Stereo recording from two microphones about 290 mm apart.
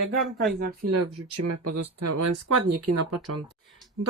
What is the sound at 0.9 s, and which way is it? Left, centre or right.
Speech, right.